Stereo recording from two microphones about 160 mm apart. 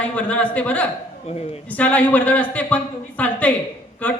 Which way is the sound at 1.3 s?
40° left (ahead or behind).